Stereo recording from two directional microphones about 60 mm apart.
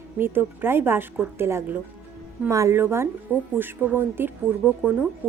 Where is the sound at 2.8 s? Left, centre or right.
Right.